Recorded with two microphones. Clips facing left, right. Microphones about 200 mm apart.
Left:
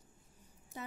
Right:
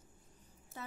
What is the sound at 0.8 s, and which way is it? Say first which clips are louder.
Speech: left 2 dB; 15° left (ahead or behind).